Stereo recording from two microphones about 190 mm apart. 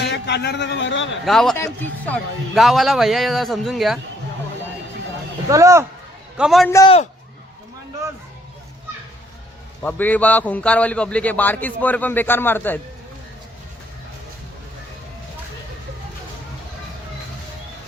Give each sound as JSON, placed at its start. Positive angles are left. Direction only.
{"t": 0.0, "sound": "a man's voice", "side_deg": 65}
{"t": 1.2, "sound": "a man's voice", "side_deg": 0}
{"t": 5.5, "sound": "speech", "side_deg": -15}
{"t": 6.3, "sound": "a man's voice", "side_deg": 0}
{"t": 6.8, "sound": "a man's voice", "side_deg": 30}
{"t": 9.8, "sound": "a man's voice", "side_deg": 10}